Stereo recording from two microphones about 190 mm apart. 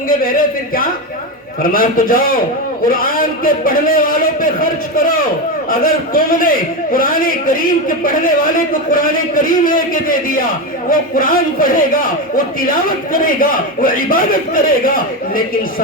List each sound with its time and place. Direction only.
0.1 s a man's voice: 50° left (ahead or behind)